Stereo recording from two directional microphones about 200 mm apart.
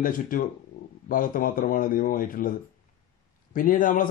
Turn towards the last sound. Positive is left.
turn(degrees=40)  # may be behind; listen again after turning